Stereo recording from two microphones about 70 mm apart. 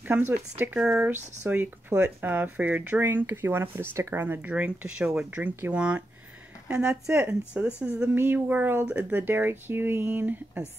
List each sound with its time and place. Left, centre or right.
0.1 s speech: right
0.7 s speech: centre
1.5 s speech: right; by 8.1 s centre
8.1 s speech: right
8.8 s speech: centre
9.2 s speech: right